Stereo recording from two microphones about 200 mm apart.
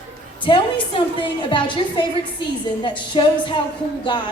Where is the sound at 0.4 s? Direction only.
25° left (ahead or behind).